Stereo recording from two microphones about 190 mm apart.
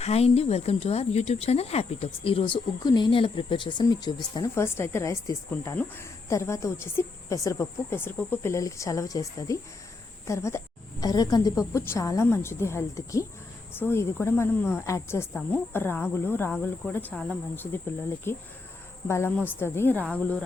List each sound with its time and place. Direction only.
0.0 s speech: 35° left (ahead or behind); by 17.2 s 10° left (ahead or behind)
18.3 s speech: 10° left (ahead or behind)